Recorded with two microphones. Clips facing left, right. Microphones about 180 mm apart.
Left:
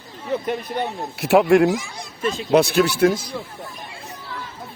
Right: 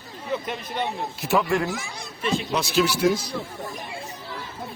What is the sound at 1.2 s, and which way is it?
Speech, 70° left (ahead or behind).